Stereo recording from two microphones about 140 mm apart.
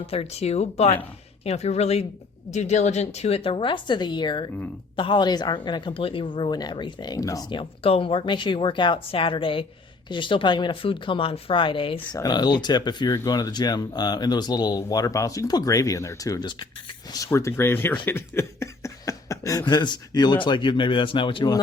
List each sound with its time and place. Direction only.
0.0 s a woman's voice: 45° left (ahead or behind); by 7.6 s 25° left (ahead or behind)
7.6 s speech: 40° left (ahead or behind)
12.1 s speech: 30° left (ahead or behind)